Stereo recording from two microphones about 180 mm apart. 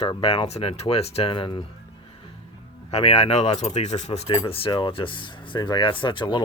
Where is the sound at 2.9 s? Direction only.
35° left (ahead or behind).